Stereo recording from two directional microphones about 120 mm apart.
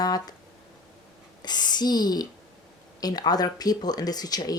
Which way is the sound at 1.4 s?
35° left (ahead or behind).